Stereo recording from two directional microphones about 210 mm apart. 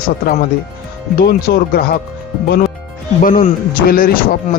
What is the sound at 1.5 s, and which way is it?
Speech, 50° left (ahead or behind).